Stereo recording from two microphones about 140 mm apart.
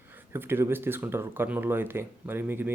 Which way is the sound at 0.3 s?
15° right (ahead or behind).